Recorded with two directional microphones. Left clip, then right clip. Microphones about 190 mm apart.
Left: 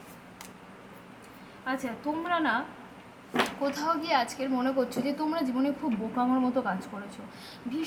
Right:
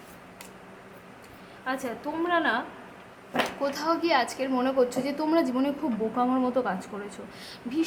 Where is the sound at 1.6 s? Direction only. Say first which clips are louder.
Right 1 dB; 10° right (ahead or behind).